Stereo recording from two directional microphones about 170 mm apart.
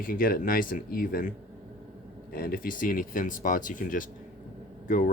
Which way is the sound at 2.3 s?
60° left (ahead or behind).